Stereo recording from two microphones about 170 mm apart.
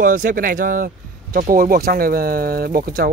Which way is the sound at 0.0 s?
55° right (ahead or behind).